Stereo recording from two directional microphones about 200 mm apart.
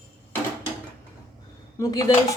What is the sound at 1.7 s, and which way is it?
Speech, 15° left (ahead or behind).